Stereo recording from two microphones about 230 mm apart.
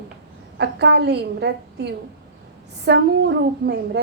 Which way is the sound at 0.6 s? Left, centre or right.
Right.